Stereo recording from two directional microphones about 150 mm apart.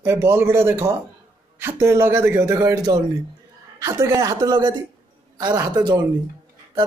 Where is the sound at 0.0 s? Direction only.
15° right (ahead or behind).